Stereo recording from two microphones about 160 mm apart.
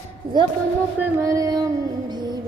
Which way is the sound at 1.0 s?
20° right (ahead or behind).